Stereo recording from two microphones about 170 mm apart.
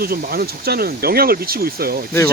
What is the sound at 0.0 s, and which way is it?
Speech, 60° right (ahead or behind).